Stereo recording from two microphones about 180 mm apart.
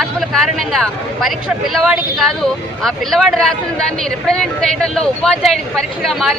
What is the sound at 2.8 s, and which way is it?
Speech, centre (ahead or behind).